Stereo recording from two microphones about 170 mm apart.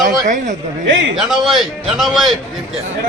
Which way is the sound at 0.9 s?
90° right.